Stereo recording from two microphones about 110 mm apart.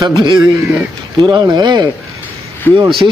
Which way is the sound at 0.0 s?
40° right (ahead or behind).